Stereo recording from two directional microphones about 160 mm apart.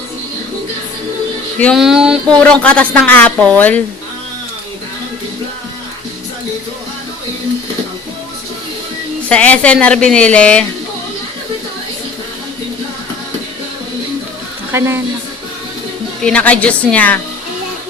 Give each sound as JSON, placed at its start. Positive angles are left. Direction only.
{"t": 1.5, "sound": "a woman's voice", "side_deg": 10}
{"t": 1.8, "sound": "a sound", "side_deg": -5}
{"t": 2.4, "sound": "a woman's voice", "side_deg": 10}
{"t": 9.3, "sound": "a woman's voice", "side_deg": 10}
{"t": 14.7, "sound": "speech", "side_deg": -15}
{"t": 16.2, "sound": "a woman's voice", "side_deg": 10}